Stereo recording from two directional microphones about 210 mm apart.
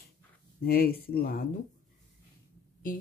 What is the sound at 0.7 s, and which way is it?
Speech, 45° left (ahead or behind).